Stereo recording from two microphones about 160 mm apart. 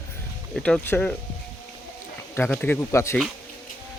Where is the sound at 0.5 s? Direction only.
5° left (ahead or behind).